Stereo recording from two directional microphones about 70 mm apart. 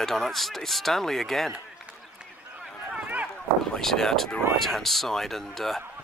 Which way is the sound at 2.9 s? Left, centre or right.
Right.